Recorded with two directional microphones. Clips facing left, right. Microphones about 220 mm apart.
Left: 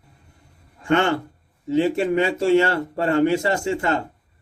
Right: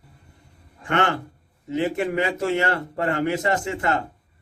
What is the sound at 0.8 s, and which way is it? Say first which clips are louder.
A man's voice: left 4 dB; 30° left (ahead or behind).